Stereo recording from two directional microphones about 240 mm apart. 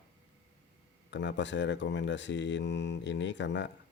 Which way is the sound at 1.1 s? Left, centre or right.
Left.